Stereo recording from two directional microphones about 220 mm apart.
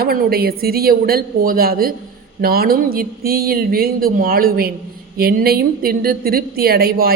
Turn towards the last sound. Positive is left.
turn(degrees=-45)  # may be behind; listen again after turning